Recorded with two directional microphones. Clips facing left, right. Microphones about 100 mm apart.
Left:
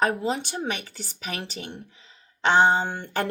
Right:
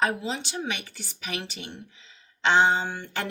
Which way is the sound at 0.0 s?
45° left (ahead or behind).